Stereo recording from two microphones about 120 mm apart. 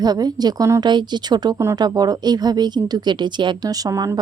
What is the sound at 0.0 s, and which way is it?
A woman's voice, 35° right (ahead or behind).